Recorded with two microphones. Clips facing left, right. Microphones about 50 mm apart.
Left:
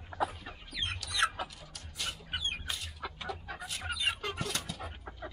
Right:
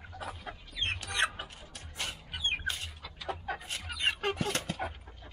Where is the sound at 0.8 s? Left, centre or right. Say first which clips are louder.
Right 1 dB; right.